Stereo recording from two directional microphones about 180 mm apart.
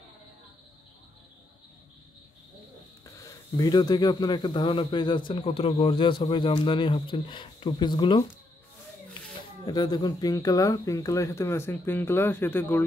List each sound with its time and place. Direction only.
3.2 s speech: 20° left (ahead or behind)
9.7 s speech: 20° left (ahead or behind)